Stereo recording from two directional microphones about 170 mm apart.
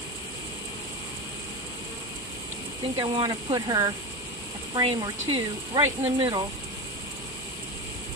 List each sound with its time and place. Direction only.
3.0 s speech: 25° right (ahead or behind)